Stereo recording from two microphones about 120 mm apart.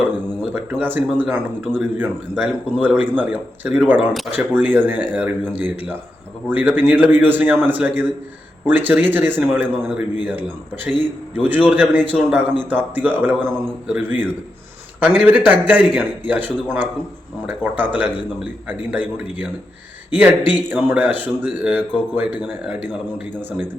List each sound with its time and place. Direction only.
0.5 s speech: 15° right (ahead or behind)